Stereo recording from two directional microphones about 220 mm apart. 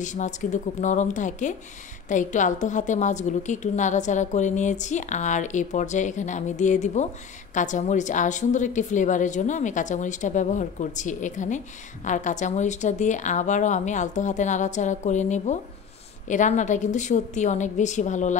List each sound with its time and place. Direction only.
0.0 s a woman's voice: 35° left (ahead or behind)